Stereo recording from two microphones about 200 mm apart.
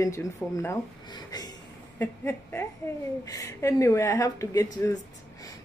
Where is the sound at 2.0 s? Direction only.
10° left (ahead or behind).